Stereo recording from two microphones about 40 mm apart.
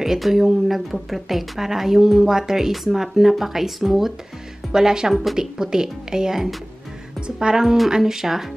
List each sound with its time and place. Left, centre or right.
0.0 s speech: centre
5.1 s speech: centre
5.4 s speech: centre